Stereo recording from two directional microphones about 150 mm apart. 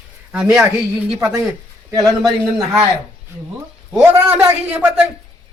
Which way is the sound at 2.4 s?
10° right (ahead or behind).